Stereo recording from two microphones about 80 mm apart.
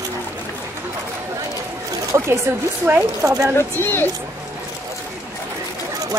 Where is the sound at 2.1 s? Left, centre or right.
Right.